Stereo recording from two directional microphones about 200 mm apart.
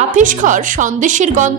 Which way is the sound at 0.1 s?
40° right (ahead or behind).